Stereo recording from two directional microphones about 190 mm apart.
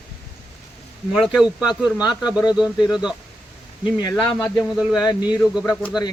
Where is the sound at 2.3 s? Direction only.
20° left (ahead or behind).